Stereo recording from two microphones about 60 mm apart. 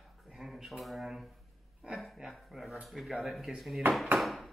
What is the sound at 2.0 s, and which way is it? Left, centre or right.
Speech, centre.